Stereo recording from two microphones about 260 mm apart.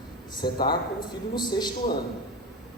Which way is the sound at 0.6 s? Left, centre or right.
Centre.